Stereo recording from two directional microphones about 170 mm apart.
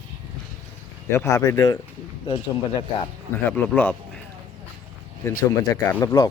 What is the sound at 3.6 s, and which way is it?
Speech, 10° left (ahead or behind).